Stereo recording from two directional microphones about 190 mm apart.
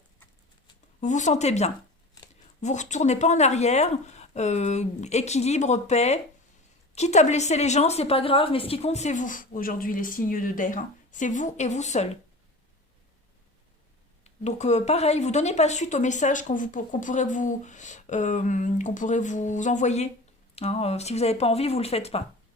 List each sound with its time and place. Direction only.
1.0 s a woman's voice: 40° left (ahead or behind)
14.3 s a woman's voice: 35° left (ahead or behind)